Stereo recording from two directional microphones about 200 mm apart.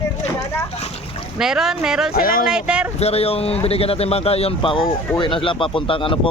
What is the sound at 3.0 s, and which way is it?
Speech, 30° left (ahead or behind).